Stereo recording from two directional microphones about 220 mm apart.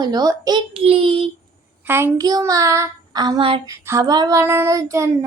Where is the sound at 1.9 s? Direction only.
10° right (ahead or behind).